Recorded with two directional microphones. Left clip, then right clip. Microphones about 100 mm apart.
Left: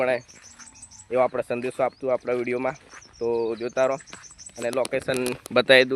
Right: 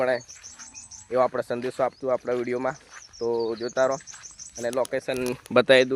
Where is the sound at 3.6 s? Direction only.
5° right (ahead or behind).